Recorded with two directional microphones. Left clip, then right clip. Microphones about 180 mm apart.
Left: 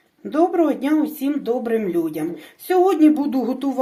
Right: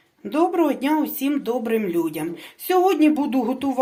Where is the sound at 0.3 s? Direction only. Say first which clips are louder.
Left 2 dB; 35° right (ahead or behind).